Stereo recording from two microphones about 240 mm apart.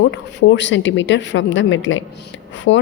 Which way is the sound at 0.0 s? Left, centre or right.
Left.